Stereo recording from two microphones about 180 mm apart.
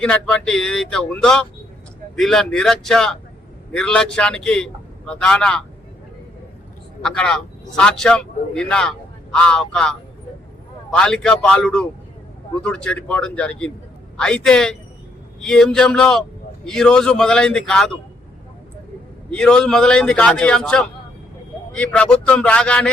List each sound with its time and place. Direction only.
0.0 s a man's voice: 5° left (ahead or behind)
7.0 s a man's voice: 5° left (ahead or behind)
19.3 s a man's voice: 5° left (ahead or behind)